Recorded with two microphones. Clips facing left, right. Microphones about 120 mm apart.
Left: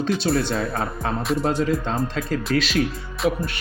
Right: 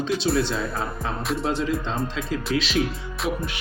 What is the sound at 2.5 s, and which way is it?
Speech, 45° left (ahead or behind).